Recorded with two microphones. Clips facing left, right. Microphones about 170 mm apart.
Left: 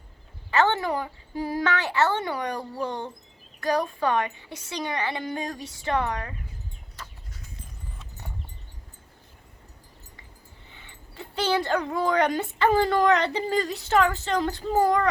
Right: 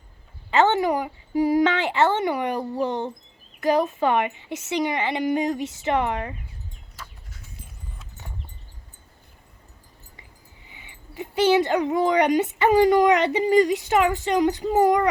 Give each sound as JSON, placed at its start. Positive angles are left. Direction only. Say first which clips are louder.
{"t": 0.5, "sound": "a woman's voice", "louder": "right 4 dB", "side_deg": -20}
{"t": 10.7, "sound": "speech", "louder": "right 4 dB", "side_deg": -15}